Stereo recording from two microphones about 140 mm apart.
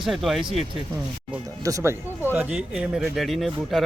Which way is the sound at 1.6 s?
25° right (ahead or behind).